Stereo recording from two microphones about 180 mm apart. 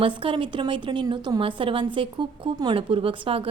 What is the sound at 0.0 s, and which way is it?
A woman's voice, 30° right (ahead or behind).